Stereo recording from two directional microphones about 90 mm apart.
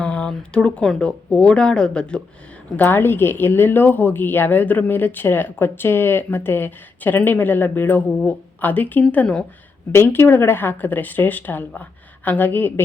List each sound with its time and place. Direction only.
0.0 s speech: 15° left (ahead or behind)
2.7 s speech: 20° left (ahead or behind)